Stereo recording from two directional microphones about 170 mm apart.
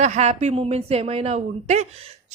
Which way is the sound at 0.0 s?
40° right (ahead or behind).